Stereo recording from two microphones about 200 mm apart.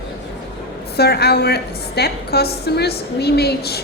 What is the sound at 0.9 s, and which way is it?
A woman's voice, 55° left (ahead or behind).